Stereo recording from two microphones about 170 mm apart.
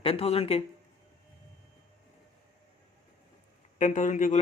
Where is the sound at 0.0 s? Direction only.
35° left (ahead or behind).